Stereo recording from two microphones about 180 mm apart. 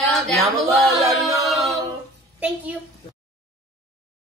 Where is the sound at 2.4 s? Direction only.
5° right (ahead or behind).